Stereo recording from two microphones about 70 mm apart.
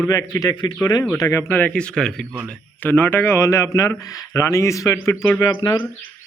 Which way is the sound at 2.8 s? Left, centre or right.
Left.